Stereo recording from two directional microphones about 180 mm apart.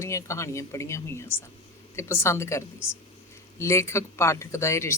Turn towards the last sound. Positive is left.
turn(degrees=15)  # may be behind; listen again after turning